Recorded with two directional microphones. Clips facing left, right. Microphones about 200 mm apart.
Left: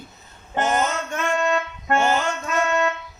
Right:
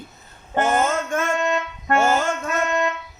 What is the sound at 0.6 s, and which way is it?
Music, 55° right (ahead or behind).